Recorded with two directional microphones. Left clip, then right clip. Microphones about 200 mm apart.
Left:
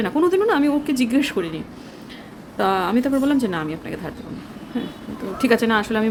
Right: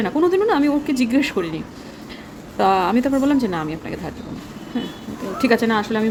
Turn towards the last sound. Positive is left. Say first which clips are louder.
# even
turn(degrees=10)  # may be behind; listen again after turning